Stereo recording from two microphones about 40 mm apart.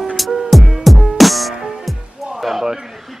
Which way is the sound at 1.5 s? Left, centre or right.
Centre.